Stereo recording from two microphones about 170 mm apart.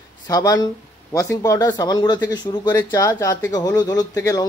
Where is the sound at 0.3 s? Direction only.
20° left (ahead or behind).